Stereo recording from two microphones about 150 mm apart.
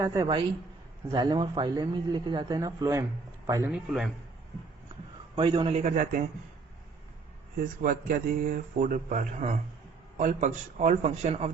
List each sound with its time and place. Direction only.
0.0 s a man's voice: 25° right (ahead or behind)
3.7 s a man's voice: centre (ahead or behind)
5.4 s a man's voice: 35° right (ahead or behind)
5.8 s a man's voice: 55° right (ahead or behind)
7.8 s a man's voice: 70° right (ahead or behind); by 11.5 s 45° right (ahead or behind)